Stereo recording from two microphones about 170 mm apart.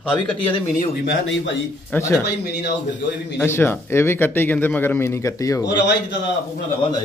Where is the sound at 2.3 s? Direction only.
75° left (ahead or behind).